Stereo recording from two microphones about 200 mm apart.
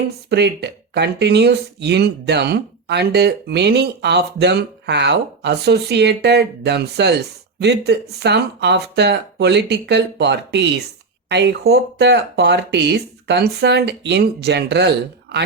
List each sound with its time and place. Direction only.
0.3 s speech: 55° right (ahead or behind)